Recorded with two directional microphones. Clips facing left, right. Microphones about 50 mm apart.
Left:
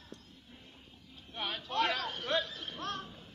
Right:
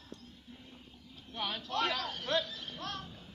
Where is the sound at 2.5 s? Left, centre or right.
Left.